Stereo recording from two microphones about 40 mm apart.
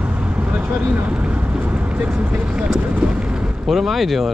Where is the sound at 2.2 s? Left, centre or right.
Right.